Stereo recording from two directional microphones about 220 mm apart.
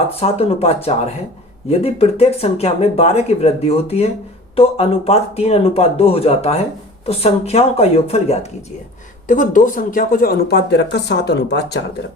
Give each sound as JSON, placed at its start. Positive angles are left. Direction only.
{"t": 0.1, "sound": "speech", "side_deg": 25}